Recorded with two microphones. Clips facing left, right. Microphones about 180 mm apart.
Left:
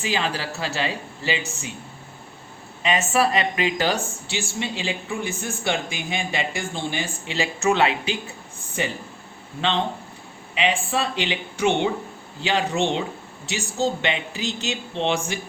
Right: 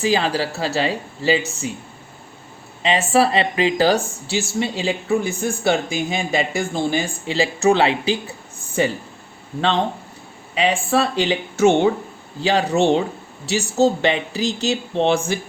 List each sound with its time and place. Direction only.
0.0 s speech: 35° right (ahead or behind)
2.8 s speech: 30° right (ahead or behind)
9.6 s speech: 40° right (ahead or behind)